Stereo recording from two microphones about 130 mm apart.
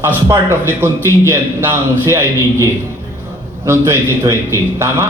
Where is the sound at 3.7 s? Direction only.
20° right (ahead or behind).